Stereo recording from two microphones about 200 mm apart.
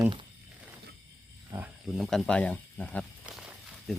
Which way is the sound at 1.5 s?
10° right (ahead or behind).